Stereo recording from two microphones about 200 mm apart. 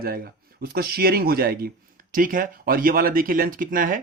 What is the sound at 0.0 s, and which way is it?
Speech, 50° right (ahead or behind).